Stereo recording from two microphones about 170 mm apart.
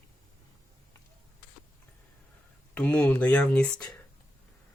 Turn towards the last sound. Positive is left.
turn(degrees=5)  # may be behind; listen again after turning